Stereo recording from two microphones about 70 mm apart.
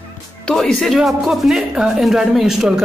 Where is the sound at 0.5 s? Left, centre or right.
Centre.